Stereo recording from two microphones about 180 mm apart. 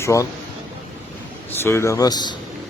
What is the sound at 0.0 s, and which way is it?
Speech, 15° left (ahead or behind).